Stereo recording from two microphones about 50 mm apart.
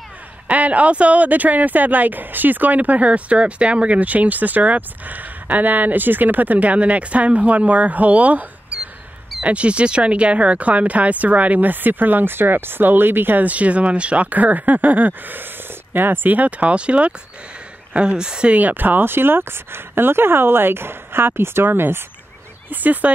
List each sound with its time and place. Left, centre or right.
0.5 s speech: right
8.7 s a sound: centre
9.4 s speech: right
18.5 s speech: right
22.7 s speech: right